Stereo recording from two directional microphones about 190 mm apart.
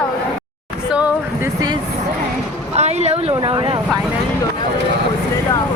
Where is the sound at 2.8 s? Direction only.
35° right (ahead or behind).